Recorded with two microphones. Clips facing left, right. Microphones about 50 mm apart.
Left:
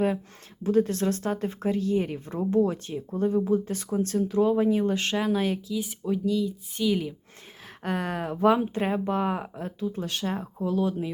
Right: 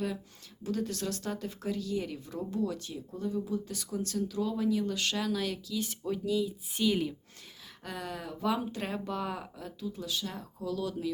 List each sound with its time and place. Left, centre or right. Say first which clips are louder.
0.6 s speech: left 10 dB; left
5.7 s speech: left 5 dB; centre
6.2 s speech: left 4 dB; centre
7.9 s speech: left 10 dB; left